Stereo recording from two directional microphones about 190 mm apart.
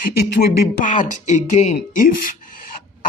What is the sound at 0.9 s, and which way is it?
Speech, 40° left (ahead or behind).